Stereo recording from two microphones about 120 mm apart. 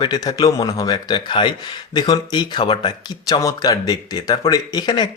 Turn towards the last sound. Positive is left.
turn(degrees=35)  # may be behind; listen again after turning